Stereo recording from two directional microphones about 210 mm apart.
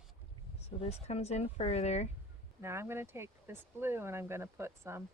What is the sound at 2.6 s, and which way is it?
Speech, 10° right (ahead or behind).